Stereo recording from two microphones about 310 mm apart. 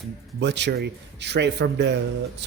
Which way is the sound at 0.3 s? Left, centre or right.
Right.